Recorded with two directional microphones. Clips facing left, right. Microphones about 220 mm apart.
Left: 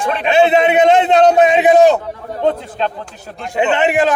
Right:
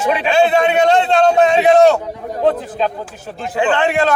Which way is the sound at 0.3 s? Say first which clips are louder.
Left 3 dB; 20° left (ahead or behind).